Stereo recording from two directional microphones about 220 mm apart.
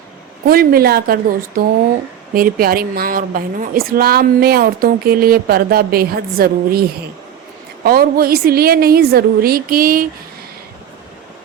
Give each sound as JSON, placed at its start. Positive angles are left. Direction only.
{"t": 0.4, "sound": "a woman's voice", "side_deg": -40}
{"t": 7.9, "sound": "a woman's voice", "side_deg": -40}